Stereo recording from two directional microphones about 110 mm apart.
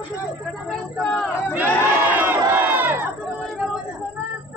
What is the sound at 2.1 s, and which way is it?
Crowd, 15° right (ahead or behind).